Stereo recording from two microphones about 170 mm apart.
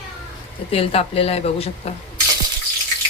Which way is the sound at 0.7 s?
35° left (ahead or behind).